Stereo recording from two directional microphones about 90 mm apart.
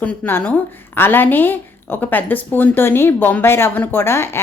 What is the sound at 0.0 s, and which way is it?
A woman's voice, 20° left (ahead or behind).